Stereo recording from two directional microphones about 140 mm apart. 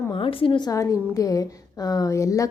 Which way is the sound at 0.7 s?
25° left (ahead or behind).